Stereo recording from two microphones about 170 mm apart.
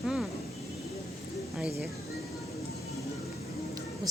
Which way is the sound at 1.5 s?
5° right (ahead or behind).